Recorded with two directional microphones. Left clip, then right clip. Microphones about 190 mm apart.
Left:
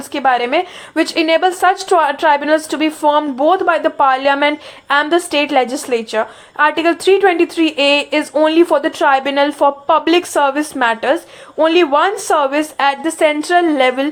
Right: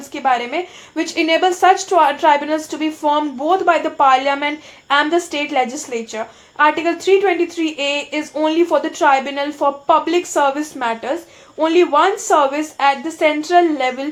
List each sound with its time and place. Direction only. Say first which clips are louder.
0.1 s a woman's voice: left 4 dB; 30° left (ahead or behind)